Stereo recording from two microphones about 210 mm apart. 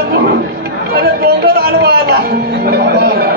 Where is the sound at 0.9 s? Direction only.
50° right (ahead or behind).